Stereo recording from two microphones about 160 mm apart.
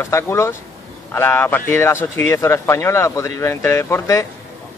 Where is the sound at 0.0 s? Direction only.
15° left (ahead or behind).